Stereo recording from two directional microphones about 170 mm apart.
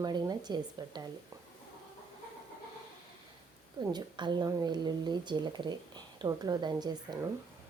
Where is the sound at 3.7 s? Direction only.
25° right (ahead or behind).